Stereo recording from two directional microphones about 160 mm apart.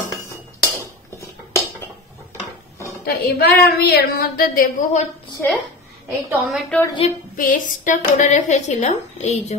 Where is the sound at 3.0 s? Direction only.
90° left; by 5.1 s 55° left (ahead or behind).